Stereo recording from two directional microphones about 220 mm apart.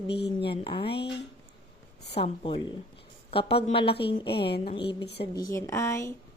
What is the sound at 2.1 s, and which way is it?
A woman's voice, 25° left (ahead or behind).